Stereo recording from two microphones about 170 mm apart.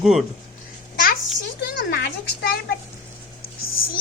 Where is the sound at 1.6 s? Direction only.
65° left (ahead or behind).